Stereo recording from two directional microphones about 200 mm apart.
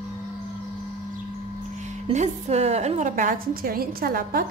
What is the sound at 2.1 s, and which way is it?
A woman's voice, 35° right (ahead or behind).